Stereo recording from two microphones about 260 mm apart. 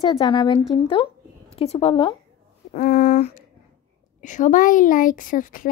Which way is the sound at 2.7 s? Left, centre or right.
Left.